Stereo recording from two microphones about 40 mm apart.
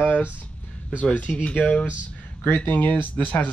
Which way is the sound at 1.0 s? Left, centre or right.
Left.